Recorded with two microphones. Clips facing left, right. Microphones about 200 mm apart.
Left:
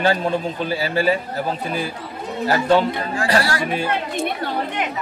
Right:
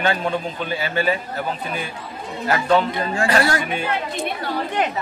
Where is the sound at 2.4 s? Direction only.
35° left (ahead or behind).